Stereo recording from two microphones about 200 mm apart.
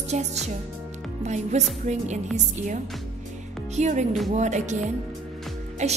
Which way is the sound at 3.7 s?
35° right (ahead or behind).